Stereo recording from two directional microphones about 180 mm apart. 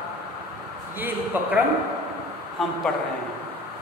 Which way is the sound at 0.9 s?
10° right (ahead or behind).